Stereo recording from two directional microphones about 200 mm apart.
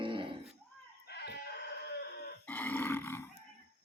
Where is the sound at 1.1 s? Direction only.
55° left (ahead or behind).